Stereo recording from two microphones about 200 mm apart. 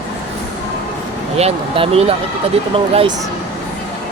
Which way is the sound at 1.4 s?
30° right (ahead or behind).